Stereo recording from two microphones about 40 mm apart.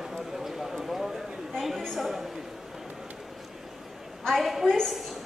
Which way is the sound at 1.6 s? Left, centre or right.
Centre.